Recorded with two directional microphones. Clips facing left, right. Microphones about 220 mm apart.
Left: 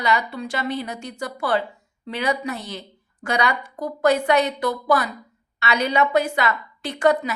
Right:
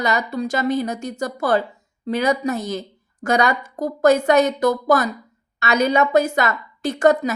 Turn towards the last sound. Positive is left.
turn(degrees=-45)  # may be behind; listen again after turning